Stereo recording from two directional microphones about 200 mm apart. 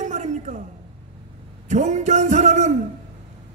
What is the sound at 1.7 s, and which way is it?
A man's voice, 35° right (ahead or behind).